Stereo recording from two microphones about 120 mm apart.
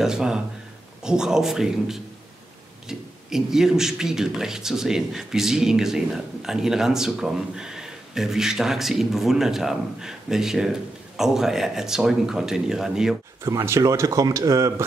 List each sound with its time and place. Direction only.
0.0 s speech: 5° right (ahead or behind)
13.4 s speech: 20° right (ahead or behind)